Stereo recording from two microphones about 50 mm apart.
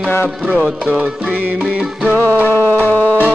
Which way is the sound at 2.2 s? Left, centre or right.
Left.